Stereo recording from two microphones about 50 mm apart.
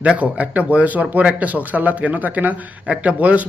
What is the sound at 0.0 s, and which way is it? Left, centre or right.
A man's voice, right.